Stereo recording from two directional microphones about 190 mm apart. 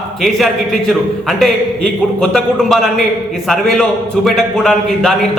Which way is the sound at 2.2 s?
5° left (ahead or behind).